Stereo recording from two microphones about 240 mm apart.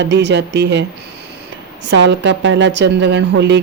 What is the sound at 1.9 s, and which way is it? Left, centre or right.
A woman's voice, right.